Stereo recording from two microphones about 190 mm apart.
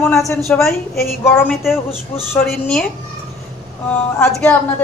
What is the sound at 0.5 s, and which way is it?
A woman's voice, 10° left (ahead or behind).